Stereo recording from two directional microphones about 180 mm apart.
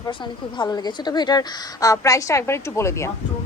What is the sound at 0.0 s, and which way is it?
A woman's voice, 25° left (ahead or behind).